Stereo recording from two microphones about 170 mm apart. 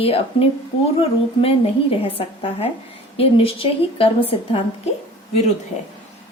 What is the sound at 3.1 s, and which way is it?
A woman's voice, 35° left (ahead or behind).